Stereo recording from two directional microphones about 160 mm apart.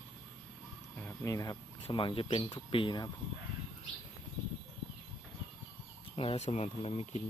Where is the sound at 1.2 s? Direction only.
20° left (ahead or behind).